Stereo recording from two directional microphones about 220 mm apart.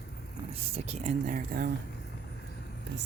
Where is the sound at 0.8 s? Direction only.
30° right (ahead or behind).